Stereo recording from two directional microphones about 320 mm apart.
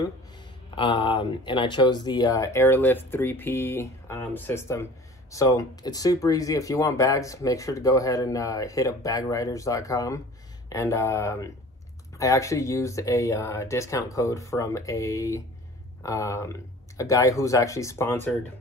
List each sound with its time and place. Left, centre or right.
0.7 s speech: centre